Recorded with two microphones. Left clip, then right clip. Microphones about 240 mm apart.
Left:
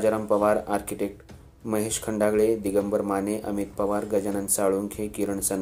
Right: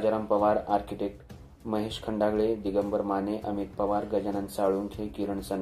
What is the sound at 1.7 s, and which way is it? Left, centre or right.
Speech, left.